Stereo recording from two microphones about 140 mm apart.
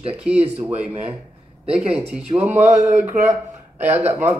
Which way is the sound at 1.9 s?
10° right (ahead or behind).